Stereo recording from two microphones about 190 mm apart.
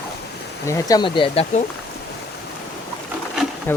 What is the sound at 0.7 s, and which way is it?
Speech, 15° left (ahead or behind).